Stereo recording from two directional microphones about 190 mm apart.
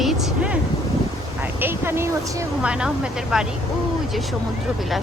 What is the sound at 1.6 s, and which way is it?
Speech, 10° right (ahead or behind).